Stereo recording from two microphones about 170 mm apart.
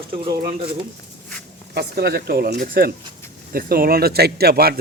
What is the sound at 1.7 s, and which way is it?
Speech, 70° right (ahead or behind).